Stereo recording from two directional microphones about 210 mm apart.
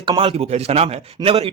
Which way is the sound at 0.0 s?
25° right (ahead or behind).